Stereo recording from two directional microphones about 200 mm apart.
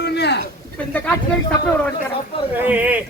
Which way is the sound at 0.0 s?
55° left (ahead or behind).